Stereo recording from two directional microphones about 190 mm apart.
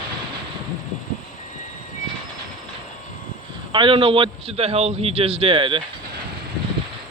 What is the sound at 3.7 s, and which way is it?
A man's voice, 25° right (ahead or behind).